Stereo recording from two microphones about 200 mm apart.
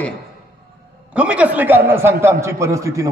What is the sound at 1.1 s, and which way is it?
A man's voice, 5° right (ahead or behind).